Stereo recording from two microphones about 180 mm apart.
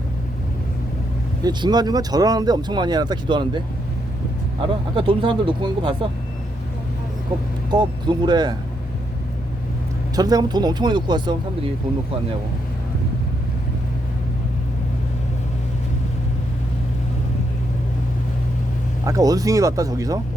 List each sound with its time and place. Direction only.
1.5 s speech: 20° right (ahead or behind)
4.9 s speech: 25° right (ahead or behind)
7.7 s speech: 25° right (ahead or behind)
10.2 s speech: 20° right (ahead or behind)
19.0 s speech: 20° right (ahead or behind)